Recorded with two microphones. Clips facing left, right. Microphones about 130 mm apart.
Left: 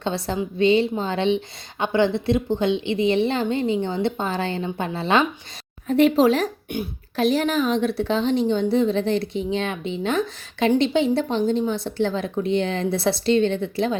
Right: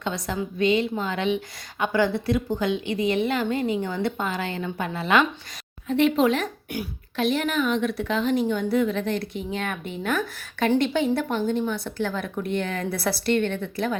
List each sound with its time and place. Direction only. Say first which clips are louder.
0.0 s a woman's voice: left 3 dB; 30° left (ahead or behind)
13.2 s speech: left 4 dB; 55° right (ahead or behind)
13.5 s a woman's voice: left 4 dB; 25° left (ahead or behind)